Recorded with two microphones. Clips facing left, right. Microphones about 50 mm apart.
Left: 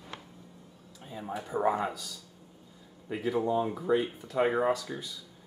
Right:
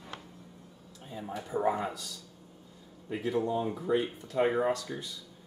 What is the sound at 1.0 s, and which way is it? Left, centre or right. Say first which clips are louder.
Speech: left 2 dB; centre.